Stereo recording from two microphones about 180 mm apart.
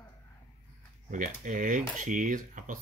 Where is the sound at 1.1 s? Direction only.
45° right (ahead or behind).